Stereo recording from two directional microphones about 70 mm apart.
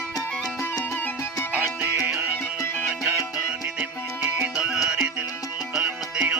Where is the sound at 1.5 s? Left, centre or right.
Right.